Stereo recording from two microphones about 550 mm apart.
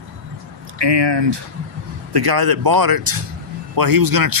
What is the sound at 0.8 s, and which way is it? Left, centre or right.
Speech, right.